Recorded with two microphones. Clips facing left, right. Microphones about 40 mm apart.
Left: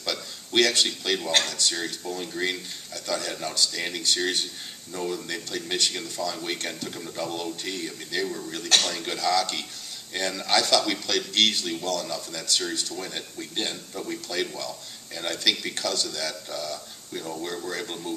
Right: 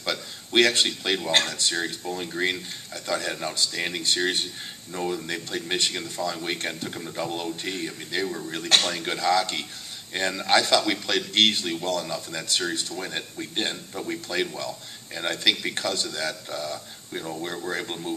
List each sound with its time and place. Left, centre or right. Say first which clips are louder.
0.0 s a man's voice: right 2 dB; right